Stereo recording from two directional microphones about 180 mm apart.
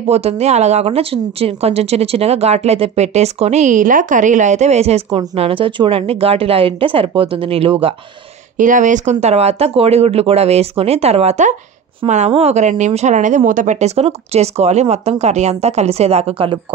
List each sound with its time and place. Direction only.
0.1 s speech: 35° right (ahead or behind)
8.5 s speech: 45° right (ahead or behind)